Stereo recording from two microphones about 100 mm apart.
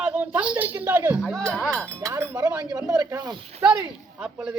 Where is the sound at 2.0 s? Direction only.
30° right (ahead or behind); by 3.3 s 45° right (ahead or behind).